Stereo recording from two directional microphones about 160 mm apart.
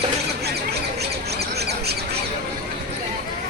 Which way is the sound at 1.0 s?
90° right.